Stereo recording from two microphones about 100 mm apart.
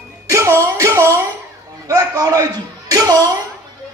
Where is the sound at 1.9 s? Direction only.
40° right (ahead or behind).